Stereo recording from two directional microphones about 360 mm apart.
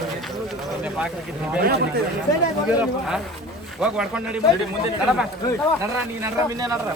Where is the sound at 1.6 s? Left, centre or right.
Right.